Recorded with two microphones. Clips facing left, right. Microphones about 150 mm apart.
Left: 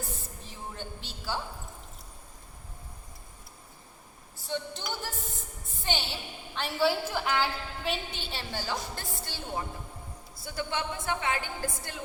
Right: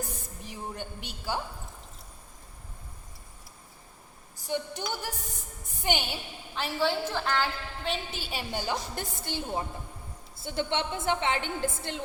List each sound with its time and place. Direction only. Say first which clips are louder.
0.1 s a sound: right 2 dB; 15° right (ahead or behind)
4.4 s a woman's voice: right 2 dB; 15° right (ahead or behind)
6.6 s a woman's voice: left 1 dB; centre (ahead or behind)
7.9 s a woman's voice: right 1 dB; 5° right (ahead or behind); by 11.9 s 25° right (ahead or behind)